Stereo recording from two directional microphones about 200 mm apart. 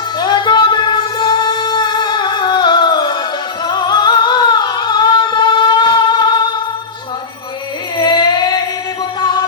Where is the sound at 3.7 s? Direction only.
20° left (ahead or behind).